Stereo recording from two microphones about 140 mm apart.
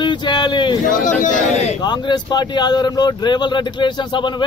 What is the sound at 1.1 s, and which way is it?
Speech, 65° left (ahead or behind).